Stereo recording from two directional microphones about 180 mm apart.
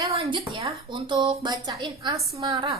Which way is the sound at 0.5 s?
25° right (ahead or behind).